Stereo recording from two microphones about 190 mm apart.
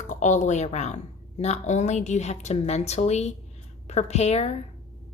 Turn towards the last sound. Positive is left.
turn(degrees=35)  # may be behind; listen again after turning